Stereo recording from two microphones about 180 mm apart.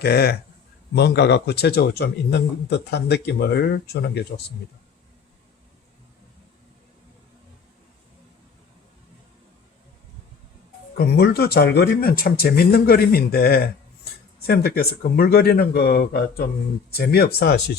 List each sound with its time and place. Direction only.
0.0 s speech: 60° left (ahead or behind)
10.9 s speech: 60° left (ahead or behind)